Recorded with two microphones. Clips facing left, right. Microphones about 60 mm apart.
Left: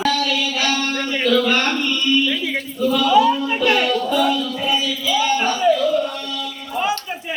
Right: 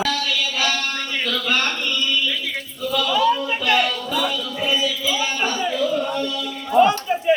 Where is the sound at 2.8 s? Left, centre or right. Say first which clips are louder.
Left 5 dB; centre.